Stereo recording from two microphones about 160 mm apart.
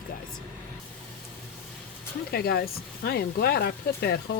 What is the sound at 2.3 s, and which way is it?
Speech, 75° left (ahead or behind).